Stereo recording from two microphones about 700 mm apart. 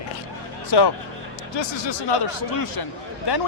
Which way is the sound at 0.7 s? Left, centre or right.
Left.